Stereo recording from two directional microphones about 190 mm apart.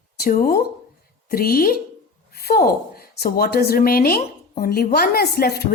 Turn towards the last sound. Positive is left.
turn(degrees=55)  # may be behind; listen again after turning